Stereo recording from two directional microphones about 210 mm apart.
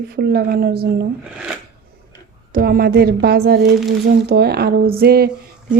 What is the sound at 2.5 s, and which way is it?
A woman's voice, 45° right (ahead or behind).